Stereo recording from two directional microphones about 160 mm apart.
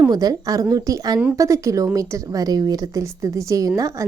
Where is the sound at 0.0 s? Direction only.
25° right (ahead or behind).